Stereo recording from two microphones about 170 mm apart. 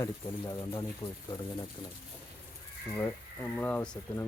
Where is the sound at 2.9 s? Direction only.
10° left (ahead or behind).